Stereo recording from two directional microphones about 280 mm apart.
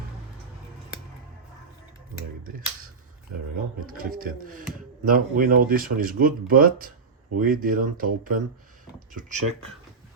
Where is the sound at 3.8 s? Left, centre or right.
Right.